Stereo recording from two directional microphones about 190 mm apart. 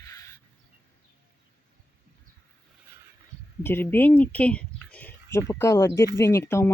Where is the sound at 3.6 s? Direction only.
10° left (ahead or behind).